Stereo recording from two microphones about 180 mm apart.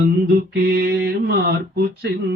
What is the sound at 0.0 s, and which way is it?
Music, 60° right (ahead or behind).